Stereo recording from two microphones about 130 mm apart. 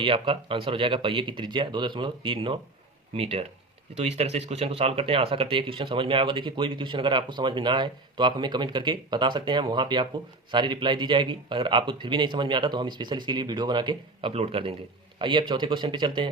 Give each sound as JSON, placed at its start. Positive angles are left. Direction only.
{"t": 0.0, "sound": "speech", "side_deg": -40}